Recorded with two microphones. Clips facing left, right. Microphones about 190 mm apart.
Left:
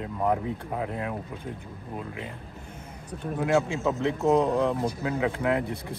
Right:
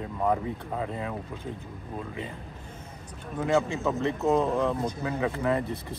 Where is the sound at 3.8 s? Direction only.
15° left (ahead or behind).